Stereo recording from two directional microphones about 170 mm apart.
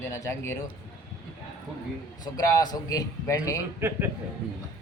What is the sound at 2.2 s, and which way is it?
A man's voice, 25° left (ahead or behind).